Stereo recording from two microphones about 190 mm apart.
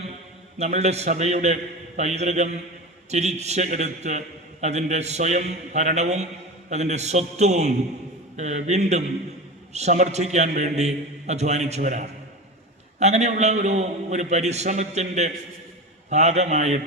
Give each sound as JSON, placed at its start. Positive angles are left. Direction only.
{"t": 0.6, "sound": "a man's voice", "side_deg": -35}